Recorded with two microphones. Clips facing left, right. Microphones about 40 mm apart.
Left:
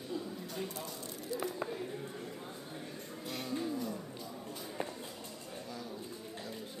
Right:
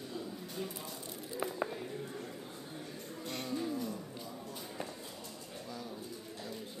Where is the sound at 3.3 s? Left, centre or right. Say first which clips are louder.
Even; centre.